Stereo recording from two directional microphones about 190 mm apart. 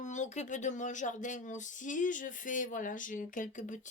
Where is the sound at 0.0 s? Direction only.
40° left (ahead or behind).